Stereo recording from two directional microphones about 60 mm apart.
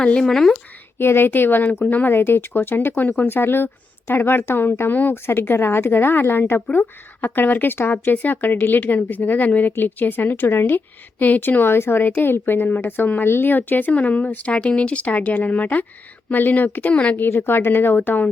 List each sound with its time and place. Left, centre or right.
0.0 s a woman's voice: centre
0.3 s speech: centre
0.9 s a woman's voice: left
17.2 s speech: left